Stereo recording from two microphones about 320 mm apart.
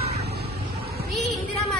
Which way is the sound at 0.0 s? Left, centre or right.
Centre.